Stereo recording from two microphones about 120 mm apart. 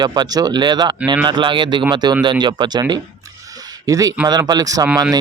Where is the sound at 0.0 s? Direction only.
35° right (ahead or behind).